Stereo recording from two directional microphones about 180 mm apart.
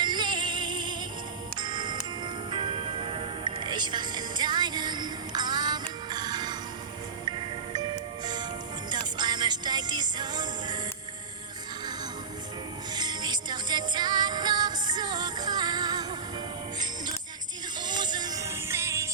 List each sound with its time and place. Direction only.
0.0 s music: 25° right (ahead or behind)
12.9 s music: 25° right (ahead or behind)
17.7 s music: 25° right (ahead or behind)